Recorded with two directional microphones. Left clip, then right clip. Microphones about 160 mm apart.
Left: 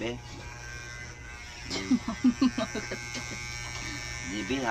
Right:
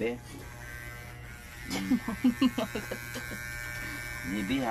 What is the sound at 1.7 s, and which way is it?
Speech, 5° right (ahead or behind).